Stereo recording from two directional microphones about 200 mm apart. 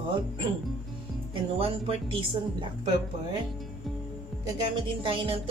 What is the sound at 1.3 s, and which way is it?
Speech, 25° right (ahead or behind).